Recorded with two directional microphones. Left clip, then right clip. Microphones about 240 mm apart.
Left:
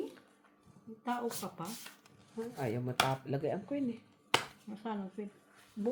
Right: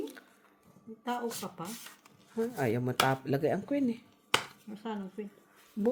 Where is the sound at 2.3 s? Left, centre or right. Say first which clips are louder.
Right 7 dB; right.